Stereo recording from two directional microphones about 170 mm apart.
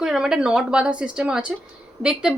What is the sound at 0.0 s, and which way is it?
A woman's voice, 5° right (ahead or behind).